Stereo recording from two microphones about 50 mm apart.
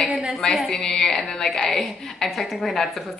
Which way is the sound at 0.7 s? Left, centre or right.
Centre.